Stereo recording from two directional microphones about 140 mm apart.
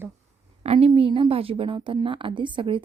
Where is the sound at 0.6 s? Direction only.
45° right (ahead or behind).